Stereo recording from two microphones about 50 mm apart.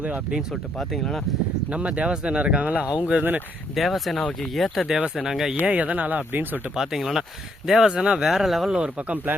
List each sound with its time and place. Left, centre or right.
0.5 s speech: centre
1.7 s speech: right
3.8 s speech: centre
5.6 s speech: right
6.7 s speech: centre
7.9 s speech: centre
8.7 s speech: right